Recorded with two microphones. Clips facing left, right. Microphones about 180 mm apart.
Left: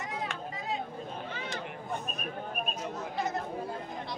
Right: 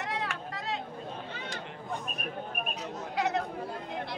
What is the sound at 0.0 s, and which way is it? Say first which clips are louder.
Vehicle: right 2 dB; 75° right (ahead or behind).